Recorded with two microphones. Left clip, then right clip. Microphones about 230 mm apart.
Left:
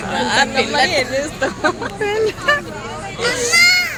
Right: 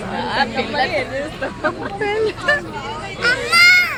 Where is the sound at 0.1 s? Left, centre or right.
Left.